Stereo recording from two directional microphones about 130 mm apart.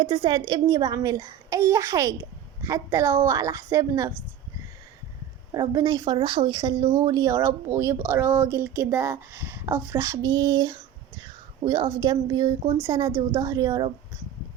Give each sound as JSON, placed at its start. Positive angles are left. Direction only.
{"t": 0.0, "sound": "speech", "side_deg": -35}
{"t": 5.5, "sound": "a woman's voice", "side_deg": -30}